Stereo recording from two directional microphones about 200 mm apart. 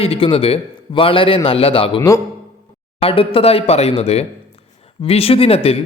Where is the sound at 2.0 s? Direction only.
15° left (ahead or behind).